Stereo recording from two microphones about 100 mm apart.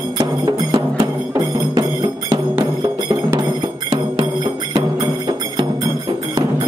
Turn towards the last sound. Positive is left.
turn(degrees=-45)  # may be behind; listen again after turning